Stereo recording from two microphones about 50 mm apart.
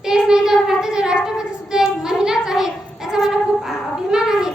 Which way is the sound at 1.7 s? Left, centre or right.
Centre.